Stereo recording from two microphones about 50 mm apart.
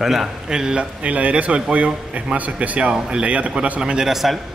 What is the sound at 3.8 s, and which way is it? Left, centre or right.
Speech, centre.